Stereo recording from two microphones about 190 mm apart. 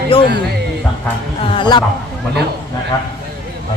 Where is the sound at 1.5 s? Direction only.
25° left (ahead or behind).